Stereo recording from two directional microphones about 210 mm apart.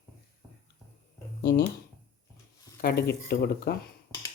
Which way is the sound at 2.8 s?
50° left (ahead or behind).